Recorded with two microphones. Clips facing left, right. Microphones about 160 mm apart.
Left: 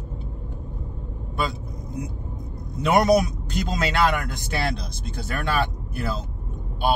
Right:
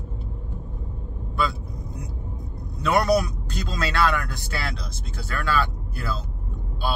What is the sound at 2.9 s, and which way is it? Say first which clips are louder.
Speech: left 2 dB; 20° left (ahead or behind).